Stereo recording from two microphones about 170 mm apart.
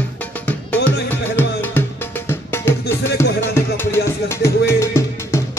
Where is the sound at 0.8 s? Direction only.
10° left (ahead or behind).